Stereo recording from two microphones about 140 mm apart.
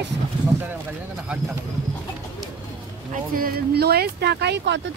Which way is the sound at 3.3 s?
90° right.